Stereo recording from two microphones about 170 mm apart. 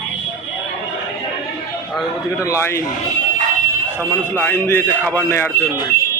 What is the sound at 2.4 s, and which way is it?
Speech, 15° left (ahead or behind).